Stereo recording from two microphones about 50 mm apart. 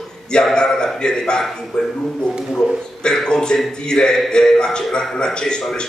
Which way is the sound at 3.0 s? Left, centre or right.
Centre.